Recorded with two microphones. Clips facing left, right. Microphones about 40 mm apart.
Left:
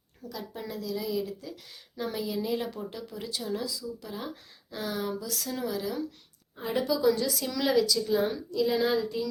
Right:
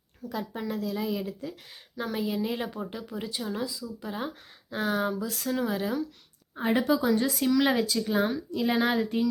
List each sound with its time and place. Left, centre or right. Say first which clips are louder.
0.3 s speech: right 5 dB; right
6.6 s speech: right 4 dB; right
7.2 s speech: right 5 dB; right